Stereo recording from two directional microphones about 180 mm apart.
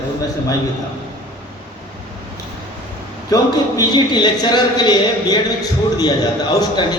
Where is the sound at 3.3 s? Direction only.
20° left (ahead or behind).